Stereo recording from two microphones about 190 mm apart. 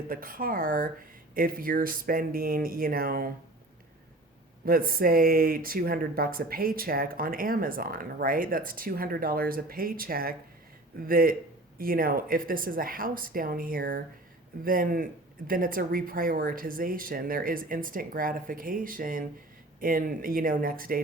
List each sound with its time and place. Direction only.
0.1 s speech: 50° right (ahead or behind)
4.6 s speech: 50° right (ahead or behind)